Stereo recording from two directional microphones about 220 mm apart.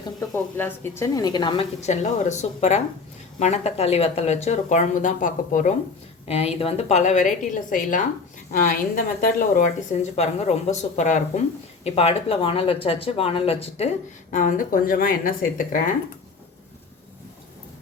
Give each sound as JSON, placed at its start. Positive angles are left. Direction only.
{"t": 0.2, "sound": "a woman's voice", "side_deg": 10}